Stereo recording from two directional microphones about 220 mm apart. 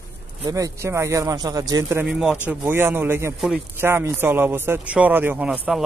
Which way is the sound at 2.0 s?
5° right (ahead or behind).